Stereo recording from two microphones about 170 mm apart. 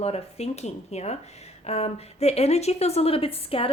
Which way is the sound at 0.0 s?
40° left (ahead or behind).